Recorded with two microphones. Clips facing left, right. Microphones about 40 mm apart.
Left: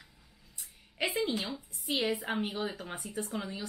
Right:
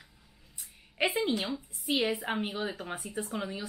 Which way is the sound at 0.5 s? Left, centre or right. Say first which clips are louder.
Right 4 dB; centre.